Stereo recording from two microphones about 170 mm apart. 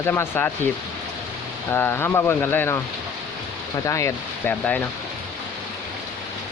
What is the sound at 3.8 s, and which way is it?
Speech, 15° left (ahead or behind).